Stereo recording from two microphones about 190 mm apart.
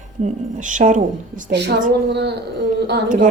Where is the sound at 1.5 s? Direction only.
60° right (ahead or behind).